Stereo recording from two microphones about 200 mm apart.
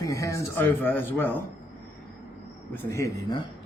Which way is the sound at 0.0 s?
15° left (ahead or behind).